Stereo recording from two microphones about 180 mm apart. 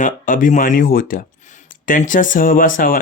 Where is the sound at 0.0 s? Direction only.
45° left (ahead or behind).